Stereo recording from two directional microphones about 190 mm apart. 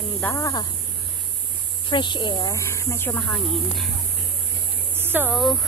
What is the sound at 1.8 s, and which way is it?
Speech, 25° left (ahead or behind).